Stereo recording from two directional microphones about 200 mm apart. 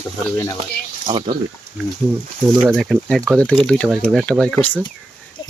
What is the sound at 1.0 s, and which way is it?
Speech, 30° right (ahead or behind).